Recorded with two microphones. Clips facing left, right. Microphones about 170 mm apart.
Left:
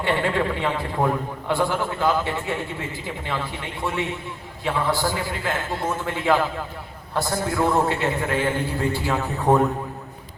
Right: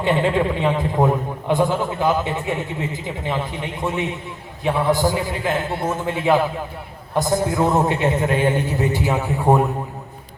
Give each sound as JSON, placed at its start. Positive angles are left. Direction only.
{"t": 0.0, "sound": "a man's voice", "side_deg": -20}